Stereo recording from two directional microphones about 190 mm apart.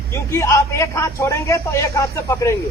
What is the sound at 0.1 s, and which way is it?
Speech, 15° left (ahead or behind).